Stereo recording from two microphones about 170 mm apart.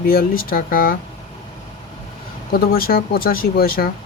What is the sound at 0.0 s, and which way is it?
Speech, 60° left (ahead or behind).